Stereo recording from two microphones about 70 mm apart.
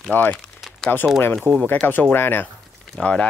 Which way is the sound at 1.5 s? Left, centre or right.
Right.